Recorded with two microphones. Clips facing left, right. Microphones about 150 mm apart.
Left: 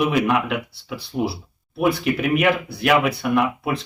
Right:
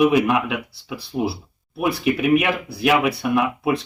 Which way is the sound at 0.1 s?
5° right (ahead or behind).